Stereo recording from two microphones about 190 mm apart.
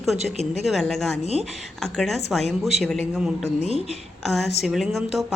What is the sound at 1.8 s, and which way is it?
A woman's voice, centre (ahead or behind).